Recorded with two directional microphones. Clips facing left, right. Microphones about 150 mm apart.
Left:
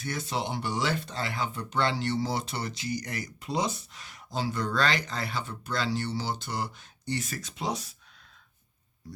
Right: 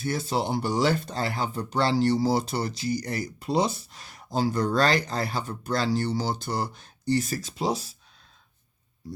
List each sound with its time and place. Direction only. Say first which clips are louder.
0.0 s speech: right 5 dB; 30° right (ahead or behind)